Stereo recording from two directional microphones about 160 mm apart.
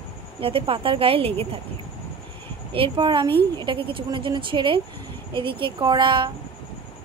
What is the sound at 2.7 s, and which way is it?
A woman's voice, 30° right (ahead or behind).